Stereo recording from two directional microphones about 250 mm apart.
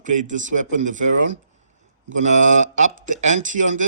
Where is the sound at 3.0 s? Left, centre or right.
Right.